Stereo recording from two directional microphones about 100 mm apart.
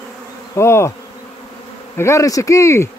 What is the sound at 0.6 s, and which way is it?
Bee, 25° left (ahead or behind).